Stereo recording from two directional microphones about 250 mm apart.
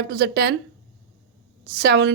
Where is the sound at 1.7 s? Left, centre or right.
Right.